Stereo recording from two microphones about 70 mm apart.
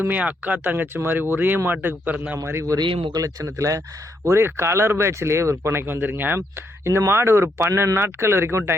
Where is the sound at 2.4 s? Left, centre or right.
Right.